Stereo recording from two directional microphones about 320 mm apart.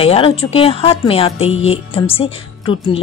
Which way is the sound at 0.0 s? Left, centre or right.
Centre.